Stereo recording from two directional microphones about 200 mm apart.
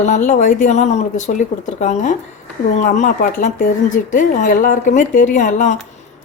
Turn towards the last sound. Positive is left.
turn(degrees=35)  # may be behind; listen again after turning